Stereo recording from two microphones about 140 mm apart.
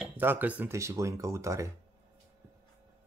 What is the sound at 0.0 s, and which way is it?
Speech, 15° right (ahead or behind).